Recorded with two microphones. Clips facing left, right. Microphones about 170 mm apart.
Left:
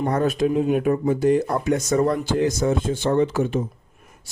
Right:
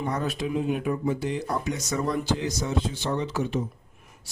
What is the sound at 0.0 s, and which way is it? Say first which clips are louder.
Speech: left 8 dB; 55° left (ahead or behind).